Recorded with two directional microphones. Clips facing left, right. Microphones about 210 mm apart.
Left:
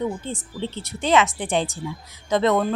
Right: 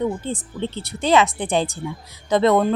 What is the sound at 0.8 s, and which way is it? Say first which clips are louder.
Speech: right 2 dB; 35° right (ahead or behind).